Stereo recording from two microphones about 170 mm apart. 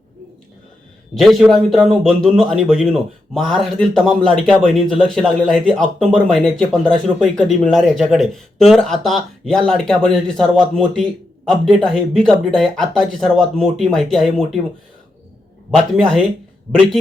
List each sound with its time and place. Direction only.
1.1 s a man's voice: centre (ahead or behind)
15.7 s a man's voice: 5° left (ahead or behind)